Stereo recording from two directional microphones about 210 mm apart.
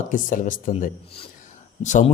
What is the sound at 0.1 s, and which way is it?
Speech, 40° left (ahead or behind).